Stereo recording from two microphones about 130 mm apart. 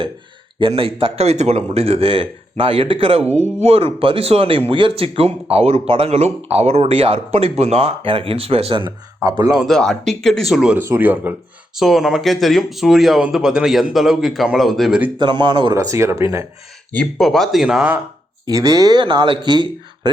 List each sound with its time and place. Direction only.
0.7 s speech: 45° right (ahead or behind)
3.3 s speech: 60° right (ahead or behind); by 9.6 s 30° right (ahead or behind)
9.6 s speech: centre (ahead or behind)
10.8 s speech: 15° right (ahead or behind)
11.7 s speech: centre (ahead or behind)
15.2 s speech: 35° right (ahead or behind)
15.7 s speech: 25° right (ahead or behind)
16.9 s speech: 5° left (ahead or behind)
18.4 s speech: 30° right (ahead or behind)